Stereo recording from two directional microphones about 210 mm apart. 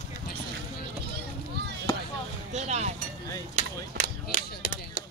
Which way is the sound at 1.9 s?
20° left (ahead or behind).